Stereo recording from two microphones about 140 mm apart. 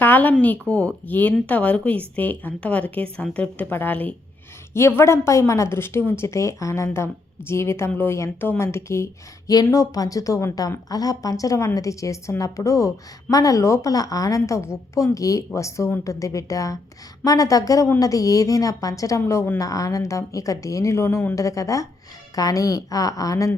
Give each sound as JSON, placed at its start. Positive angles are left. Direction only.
{"t": 0.0, "sound": "a woman's voice", "side_deg": 10}